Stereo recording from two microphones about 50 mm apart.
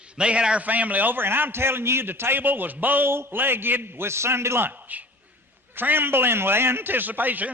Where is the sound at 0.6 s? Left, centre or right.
Right.